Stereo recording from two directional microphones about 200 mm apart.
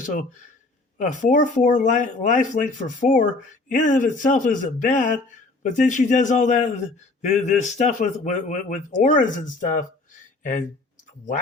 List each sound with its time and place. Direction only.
0.9 s speech: 40° left (ahead or behind)